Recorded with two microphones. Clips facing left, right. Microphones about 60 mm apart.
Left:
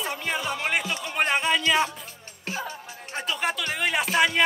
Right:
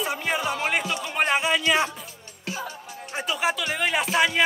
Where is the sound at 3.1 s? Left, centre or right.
Centre.